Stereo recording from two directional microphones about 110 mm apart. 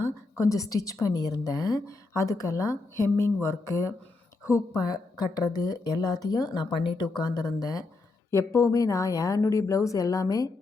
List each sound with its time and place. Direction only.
0.0 s a woman's voice: 30° left (ahead or behind)